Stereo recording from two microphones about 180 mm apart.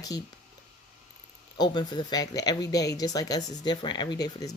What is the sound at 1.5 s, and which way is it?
Speech, 25° left (ahead or behind).